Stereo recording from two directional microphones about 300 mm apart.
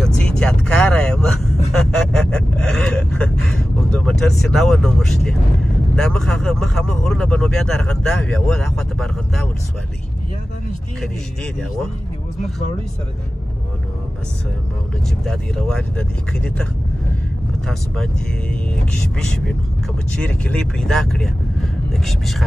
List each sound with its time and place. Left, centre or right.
0.0 s vehicle: centre
1.7 s a sound: centre
5.9 s speech: centre
15.2 s speech: centre
17.6 s speech: centre